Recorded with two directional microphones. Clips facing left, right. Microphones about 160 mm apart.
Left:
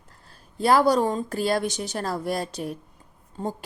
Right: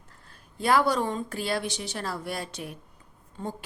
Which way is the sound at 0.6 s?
35° left (ahead or behind).